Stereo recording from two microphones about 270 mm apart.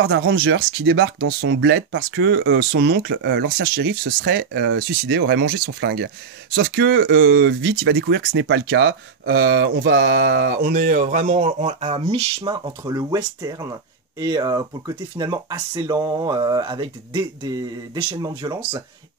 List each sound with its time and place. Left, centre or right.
0.2 s speech: right; by 18.6 s centre